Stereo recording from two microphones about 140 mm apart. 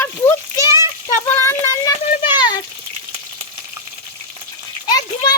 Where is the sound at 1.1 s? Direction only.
20° left (ahead or behind).